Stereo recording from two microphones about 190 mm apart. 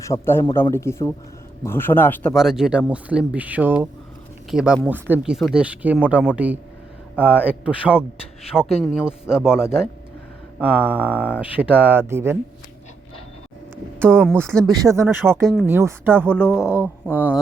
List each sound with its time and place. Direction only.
0.0 s a man's voice: 15° left (ahead or behind)
2.3 s speech: centre (ahead or behind)
14.4 s speech: 5° left (ahead or behind)
14.7 s speech: 20° right (ahead or behind)
16.5 s a man's voice: 15° left (ahead or behind)
16.7 s speech: 10° right (ahead or behind)